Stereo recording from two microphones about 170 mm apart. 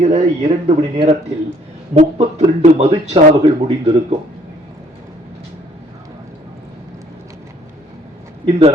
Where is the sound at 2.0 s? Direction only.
40° right (ahead or behind).